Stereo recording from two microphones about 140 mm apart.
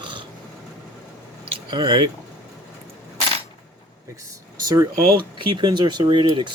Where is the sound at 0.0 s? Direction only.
35° right (ahead or behind).